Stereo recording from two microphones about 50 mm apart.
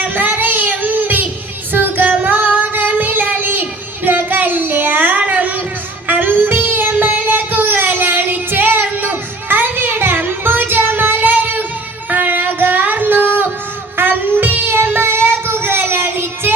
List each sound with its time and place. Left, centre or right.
0.0 s child singing: right
1.7 s female singing: right
6.1 s child singing: right
12.0 s a sound: right
13.9 s child singing: right